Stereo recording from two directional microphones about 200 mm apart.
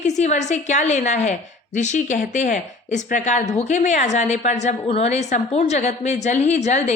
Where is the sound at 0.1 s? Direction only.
35° left (ahead or behind).